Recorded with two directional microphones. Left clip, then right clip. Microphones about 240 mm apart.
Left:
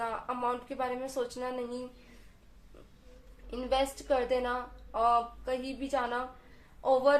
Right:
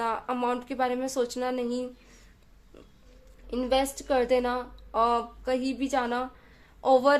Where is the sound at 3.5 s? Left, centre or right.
Right.